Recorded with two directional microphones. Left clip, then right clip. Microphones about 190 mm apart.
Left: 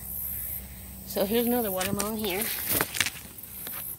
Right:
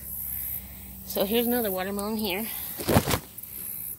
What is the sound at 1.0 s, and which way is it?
Speech, 25° right (ahead or behind).